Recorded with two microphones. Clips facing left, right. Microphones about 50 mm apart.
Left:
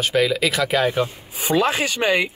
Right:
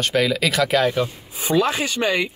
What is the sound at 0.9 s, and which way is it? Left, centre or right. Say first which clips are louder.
Speech: left 1 dB; centre.